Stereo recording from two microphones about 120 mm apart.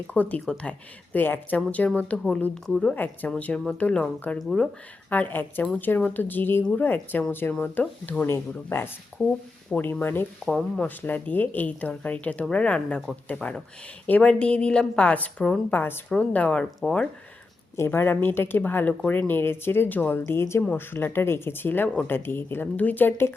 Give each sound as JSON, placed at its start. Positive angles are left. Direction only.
{"t": 0.1, "sound": "speech", "side_deg": 10}
{"t": 5.0, "sound": "speech", "side_deg": 15}
{"t": 17.7, "sound": "speech", "side_deg": 20}